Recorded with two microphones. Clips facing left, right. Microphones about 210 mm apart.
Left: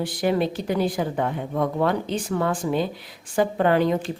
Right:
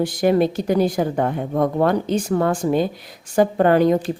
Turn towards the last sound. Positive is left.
turn(degrees=-45)  # may be behind; listen again after turning